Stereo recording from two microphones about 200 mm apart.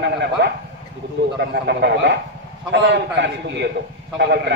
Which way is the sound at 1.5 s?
60° right (ahead or behind).